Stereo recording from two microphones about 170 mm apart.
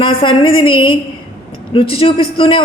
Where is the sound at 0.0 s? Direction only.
30° left (ahead or behind).